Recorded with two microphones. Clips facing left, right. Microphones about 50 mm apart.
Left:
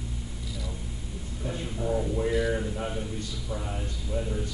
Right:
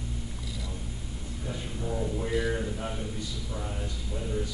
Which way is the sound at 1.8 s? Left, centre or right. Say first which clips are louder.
Left 4 dB; centre.